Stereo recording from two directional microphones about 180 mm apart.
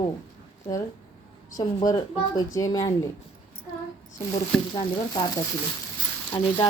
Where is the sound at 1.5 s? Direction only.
20° left (ahead or behind).